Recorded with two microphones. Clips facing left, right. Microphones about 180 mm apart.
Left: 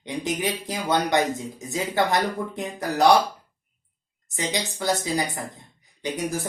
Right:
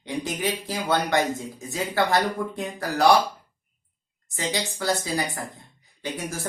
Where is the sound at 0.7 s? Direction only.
20° left (ahead or behind).